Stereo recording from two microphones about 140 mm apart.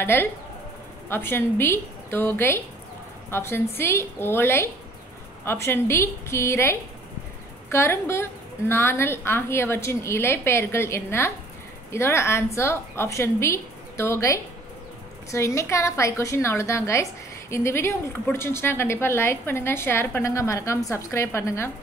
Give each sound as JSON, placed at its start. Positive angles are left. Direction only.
{"t": 0.0, "sound": "a woman's voice", "side_deg": 15}